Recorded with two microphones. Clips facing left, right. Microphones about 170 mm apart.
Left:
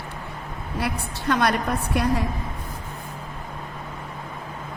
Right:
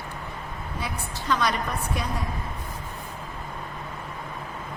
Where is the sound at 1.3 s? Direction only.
60° left (ahead or behind).